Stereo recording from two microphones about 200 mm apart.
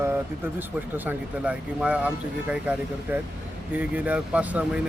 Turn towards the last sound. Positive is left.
turn(degrees=-5)  # may be behind; listen again after turning